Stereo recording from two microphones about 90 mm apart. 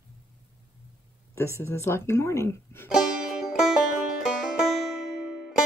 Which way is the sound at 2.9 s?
Centre (ahead or behind).